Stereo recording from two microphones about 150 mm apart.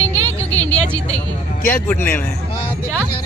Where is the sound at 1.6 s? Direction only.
10° left (ahead or behind).